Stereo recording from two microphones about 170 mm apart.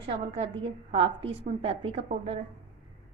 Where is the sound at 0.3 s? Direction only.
35° right (ahead or behind).